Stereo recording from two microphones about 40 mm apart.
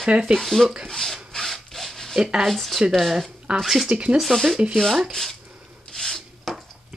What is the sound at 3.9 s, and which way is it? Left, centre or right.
Speech, right.